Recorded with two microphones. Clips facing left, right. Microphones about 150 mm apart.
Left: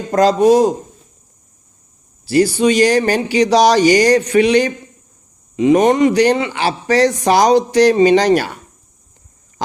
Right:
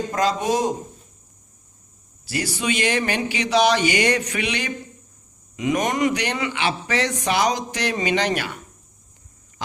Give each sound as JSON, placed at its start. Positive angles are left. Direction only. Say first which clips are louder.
{"t": 0.1, "sound": "speech", "louder": "left 13 dB", "side_deg": 35}
{"t": 2.2, "sound": "speech", "louder": "left 13 dB", "side_deg": 30}